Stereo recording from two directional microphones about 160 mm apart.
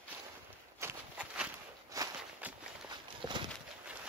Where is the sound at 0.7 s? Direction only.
10° right (ahead or behind).